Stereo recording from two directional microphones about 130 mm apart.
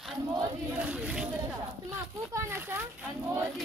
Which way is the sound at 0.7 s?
10° right (ahead or behind).